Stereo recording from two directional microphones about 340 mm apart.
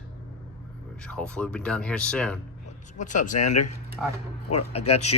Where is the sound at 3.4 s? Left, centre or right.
Left.